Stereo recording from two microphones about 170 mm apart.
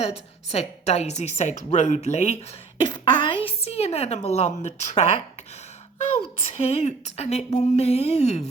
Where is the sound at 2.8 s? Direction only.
25° left (ahead or behind).